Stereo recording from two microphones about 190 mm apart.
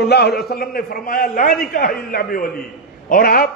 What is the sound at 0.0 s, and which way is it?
A man's voice, 55° left (ahead or behind).